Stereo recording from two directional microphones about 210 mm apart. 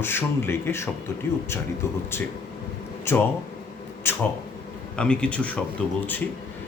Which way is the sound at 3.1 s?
10° left (ahead or behind).